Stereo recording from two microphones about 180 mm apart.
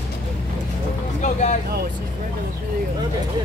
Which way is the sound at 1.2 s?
40° left (ahead or behind).